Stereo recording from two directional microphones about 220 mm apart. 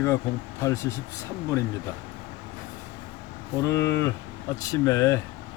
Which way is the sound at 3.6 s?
15° left (ahead or behind).